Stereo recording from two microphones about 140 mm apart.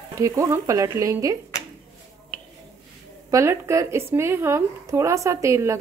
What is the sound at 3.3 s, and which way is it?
A woman's voice, 20° right (ahead or behind).